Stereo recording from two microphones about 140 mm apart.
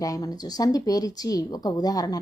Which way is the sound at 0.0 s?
25° left (ahead or behind).